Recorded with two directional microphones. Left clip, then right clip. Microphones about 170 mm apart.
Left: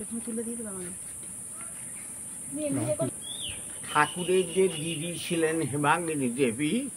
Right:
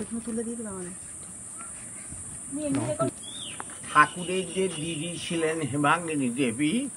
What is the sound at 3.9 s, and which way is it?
Speech, 15° left (ahead or behind).